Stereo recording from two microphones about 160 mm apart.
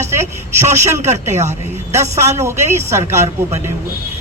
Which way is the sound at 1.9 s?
15° right (ahead or behind).